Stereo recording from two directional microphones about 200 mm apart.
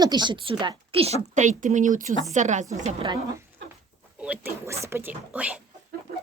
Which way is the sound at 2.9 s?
25° right (ahead or behind).